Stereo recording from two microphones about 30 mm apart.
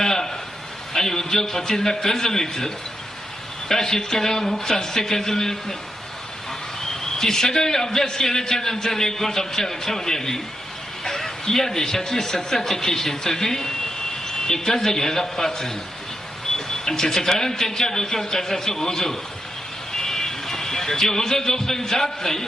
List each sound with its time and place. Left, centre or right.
0.0 s a sound: centre
0.9 s a man's voice: centre
6.9 s a man's voice: centre